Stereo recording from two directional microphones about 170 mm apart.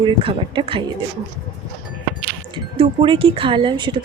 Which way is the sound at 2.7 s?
30° right (ahead or behind).